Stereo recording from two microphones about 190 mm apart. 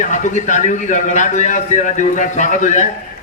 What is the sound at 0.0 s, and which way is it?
A man's voice, 40° left (ahead or behind).